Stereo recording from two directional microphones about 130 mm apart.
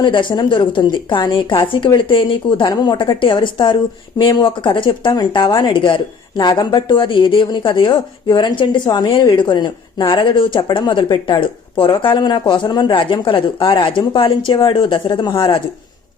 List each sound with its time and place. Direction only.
0.0 s speech: 35° left (ahead or behind)